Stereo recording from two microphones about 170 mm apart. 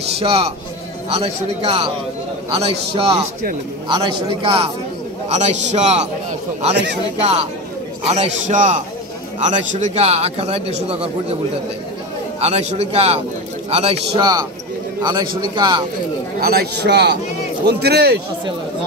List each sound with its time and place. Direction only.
0.2 s a man's voice: 35° right (ahead or behind)
5.3 s a man's voice: 45° right (ahead or behind)
8.1 s a man's voice: 45° right (ahead or behind)
12.4 s speech: 40° right (ahead or behind)
15.0 s a man's voice: 25° right (ahead or behind)
16.3 s a man's voice: 70° right (ahead or behind)